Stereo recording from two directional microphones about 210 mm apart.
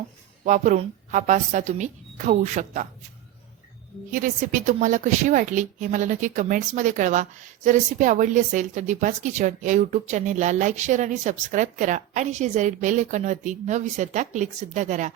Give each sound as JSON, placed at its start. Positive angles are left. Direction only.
{"t": 0.4, "sound": "a woman's voice", "side_deg": -35}
{"t": 4.1, "sound": "a woman's voice", "side_deg": -40}